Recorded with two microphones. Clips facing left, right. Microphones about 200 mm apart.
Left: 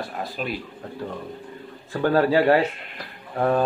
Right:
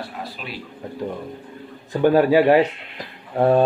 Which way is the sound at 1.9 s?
15° right (ahead or behind).